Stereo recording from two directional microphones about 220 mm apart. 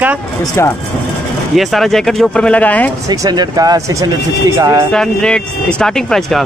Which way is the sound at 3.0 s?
15° right (ahead or behind).